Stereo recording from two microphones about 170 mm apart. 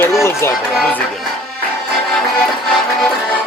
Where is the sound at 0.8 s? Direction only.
5° left (ahead or behind).